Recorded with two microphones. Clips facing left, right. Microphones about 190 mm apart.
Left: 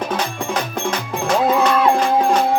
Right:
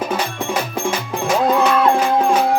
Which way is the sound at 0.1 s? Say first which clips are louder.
Right 1 dB; 5° right (ahead or behind).